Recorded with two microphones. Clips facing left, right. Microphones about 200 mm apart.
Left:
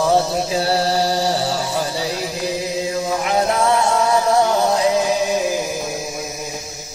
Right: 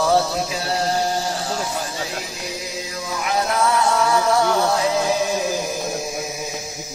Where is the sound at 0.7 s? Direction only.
35° left (ahead or behind).